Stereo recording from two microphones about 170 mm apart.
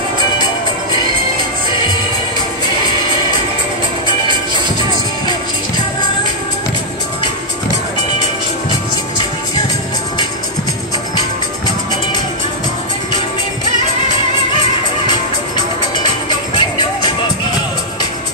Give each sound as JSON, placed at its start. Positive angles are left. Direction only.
{"t": 16.3, "sound": "music", "side_deg": 25}